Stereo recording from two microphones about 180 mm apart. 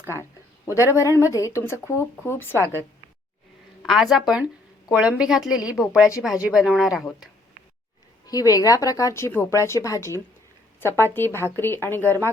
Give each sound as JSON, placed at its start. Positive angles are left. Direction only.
{"t": 0.7, "sound": "speech", "side_deg": 15}
{"t": 3.8, "sound": "speech", "side_deg": 0}
{"t": 8.3, "sound": "a woman's voice", "side_deg": 20}